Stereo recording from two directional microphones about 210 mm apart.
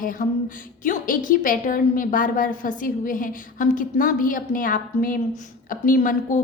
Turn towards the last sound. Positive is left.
turn(degrees=40)  # may be behind; listen again after turning